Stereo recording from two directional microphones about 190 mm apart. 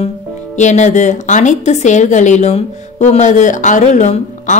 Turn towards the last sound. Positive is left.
turn(degrees=40)  # may be behind; listen again after turning